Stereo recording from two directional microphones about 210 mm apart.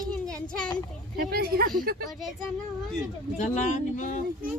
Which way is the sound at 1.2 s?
45° right (ahead or behind).